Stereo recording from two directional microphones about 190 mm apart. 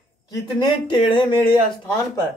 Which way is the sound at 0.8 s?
25° left (ahead or behind).